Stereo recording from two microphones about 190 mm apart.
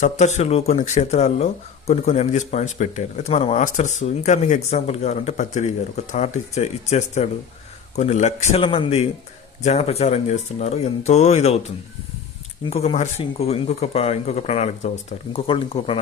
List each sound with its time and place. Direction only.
0.0 s speech: 40° left (ahead or behind)
12.7 s speech: 35° left (ahead or behind)